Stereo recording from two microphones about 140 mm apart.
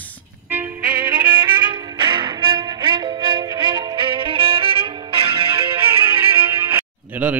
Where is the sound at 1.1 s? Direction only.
35° right (ahead or behind).